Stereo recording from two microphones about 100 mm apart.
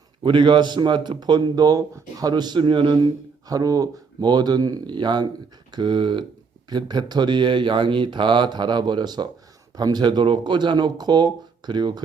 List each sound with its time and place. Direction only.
0.2 s speech: 50° right (ahead or behind)